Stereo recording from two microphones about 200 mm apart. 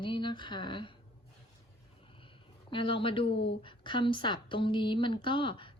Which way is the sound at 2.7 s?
25° left (ahead or behind).